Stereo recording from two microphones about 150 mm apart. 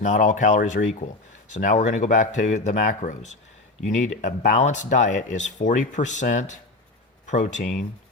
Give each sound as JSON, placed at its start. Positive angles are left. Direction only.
{"t": 0.0, "sound": "speech", "side_deg": 55}